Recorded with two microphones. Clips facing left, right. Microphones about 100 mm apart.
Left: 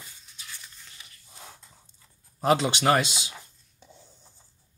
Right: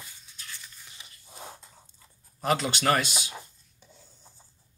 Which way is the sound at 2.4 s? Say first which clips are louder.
Left 4 dB; 20° left (ahead or behind).